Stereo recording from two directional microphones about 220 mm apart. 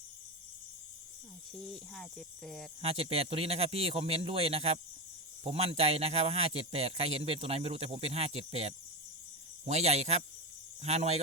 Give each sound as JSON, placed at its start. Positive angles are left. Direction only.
{"t": 1.6, "sound": "speech", "side_deg": 5}
{"t": 2.8, "sound": "a man's voice", "side_deg": -25}